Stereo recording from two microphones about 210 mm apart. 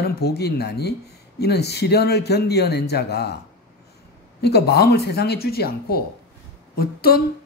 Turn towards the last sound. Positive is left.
turn(degrees=45)  # may be behind; listen again after turning